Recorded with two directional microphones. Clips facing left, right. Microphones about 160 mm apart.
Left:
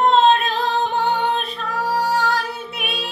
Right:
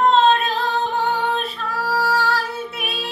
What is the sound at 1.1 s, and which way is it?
Female singing, 20° left (ahead or behind).